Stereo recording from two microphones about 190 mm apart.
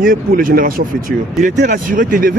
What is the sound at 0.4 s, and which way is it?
Speech, 50° right (ahead or behind).